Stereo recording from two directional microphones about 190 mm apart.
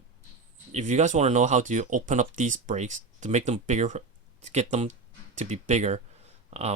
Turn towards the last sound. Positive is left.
turn(degrees=-35)  # may be behind; listen again after turning